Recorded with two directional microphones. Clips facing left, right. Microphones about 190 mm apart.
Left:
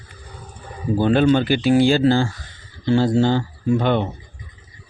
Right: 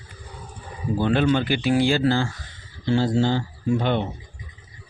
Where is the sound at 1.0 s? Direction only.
40° left (ahead or behind).